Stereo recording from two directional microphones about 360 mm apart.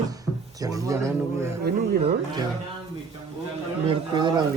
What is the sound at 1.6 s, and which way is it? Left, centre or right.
Speech, right.